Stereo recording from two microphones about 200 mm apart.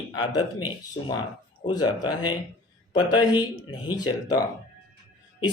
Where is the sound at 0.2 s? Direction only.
25° left (ahead or behind).